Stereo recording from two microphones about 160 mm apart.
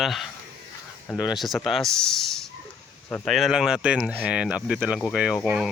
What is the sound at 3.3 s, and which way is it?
Speech, centre (ahead or behind).